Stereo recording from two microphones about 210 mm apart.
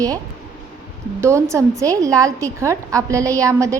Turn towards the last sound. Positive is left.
turn(degrees=-15)  # may be behind; listen again after turning